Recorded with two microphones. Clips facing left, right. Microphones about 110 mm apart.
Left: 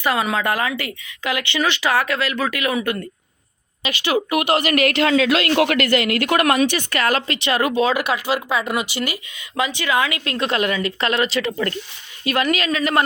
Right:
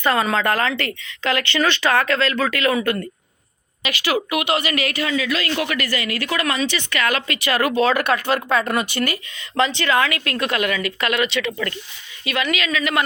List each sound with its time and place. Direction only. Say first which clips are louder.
0.0 s a woman's voice: right 1 dB; 10° left (ahead or behind); by 4.4 s 25° left (ahead or behind)
4.5 s speech: left 4 dB; 55° left (ahead or behind); by 7.8 s 20° left (ahead or behind)
7.8 s a woman's voice: right 1 dB; 10° left (ahead or behind); by 13.0 s 40° left (ahead or behind)